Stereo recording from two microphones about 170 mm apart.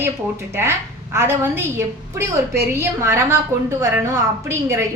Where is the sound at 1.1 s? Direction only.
15° right (ahead or behind).